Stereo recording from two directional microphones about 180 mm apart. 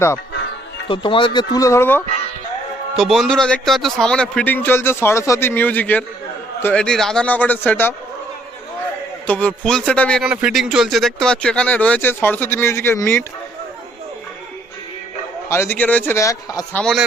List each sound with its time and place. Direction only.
0.9 s speech: 30° left (ahead or behind); by 2.0 s 10° left (ahead or behind)
2.9 s a man's voice: centre (ahead or behind)
9.2 s a man's voice: 10° left (ahead or behind)
15.4 s a man's voice: 15° left (ahead or behind)